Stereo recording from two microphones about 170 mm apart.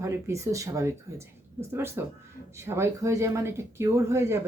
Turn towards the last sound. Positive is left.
turn(degrees=-15)  # may be behind; listen again after turning